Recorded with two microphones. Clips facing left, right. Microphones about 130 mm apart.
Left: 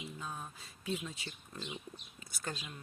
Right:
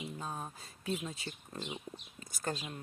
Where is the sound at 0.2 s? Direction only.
35° right (ahead or behind).